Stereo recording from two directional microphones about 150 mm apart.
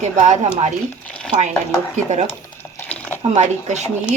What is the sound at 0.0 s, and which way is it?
Speech, 50° right (ahead or behind).